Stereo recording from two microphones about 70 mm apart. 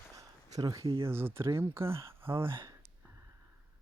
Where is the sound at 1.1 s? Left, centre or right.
Right.